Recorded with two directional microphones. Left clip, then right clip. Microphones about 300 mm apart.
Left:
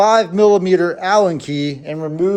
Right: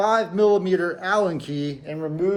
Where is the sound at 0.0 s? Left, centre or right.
Centre.